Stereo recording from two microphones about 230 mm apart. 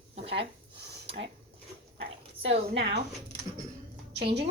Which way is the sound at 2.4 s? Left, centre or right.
Right.